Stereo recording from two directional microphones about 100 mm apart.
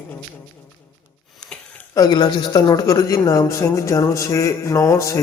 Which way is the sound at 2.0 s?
45° left (ahead or behind).